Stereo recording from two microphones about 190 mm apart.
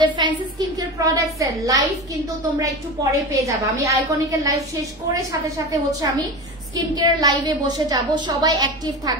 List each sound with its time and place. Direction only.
0.0 s a woman's voice: 20° right (ahead or behind)